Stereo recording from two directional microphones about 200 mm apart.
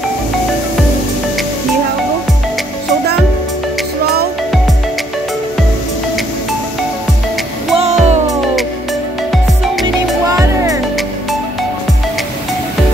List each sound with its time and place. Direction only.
7.7 s music: 35° right (ahead or behind)
10.2 s music: 15° right (ahead or behind)